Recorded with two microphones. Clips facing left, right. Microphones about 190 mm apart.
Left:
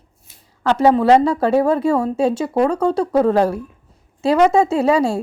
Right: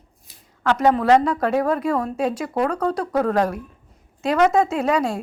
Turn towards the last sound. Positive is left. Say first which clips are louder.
# left 5 dB
turn(degrees=30)  # may be behind; listen again after turning